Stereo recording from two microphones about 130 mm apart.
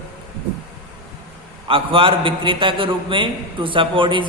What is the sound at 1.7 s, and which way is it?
A man's voice, 45° right (ahead or behind).